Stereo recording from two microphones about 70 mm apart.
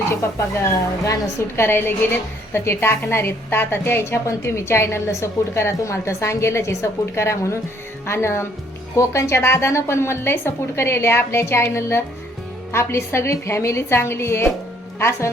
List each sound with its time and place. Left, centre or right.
0.6 s a woman's voice: left
1.5 s a woman's voice: left